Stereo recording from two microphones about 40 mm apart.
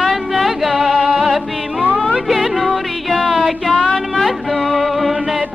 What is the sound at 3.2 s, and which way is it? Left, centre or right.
Music, centre.